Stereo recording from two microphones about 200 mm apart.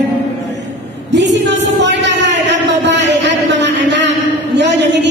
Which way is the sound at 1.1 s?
60° right (ahead or behind).